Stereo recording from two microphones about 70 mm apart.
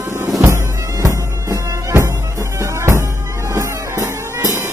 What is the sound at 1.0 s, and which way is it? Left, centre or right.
Music, right.